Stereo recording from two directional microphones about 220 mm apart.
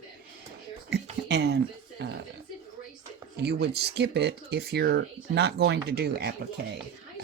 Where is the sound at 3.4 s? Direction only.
45° right (ahead or behind).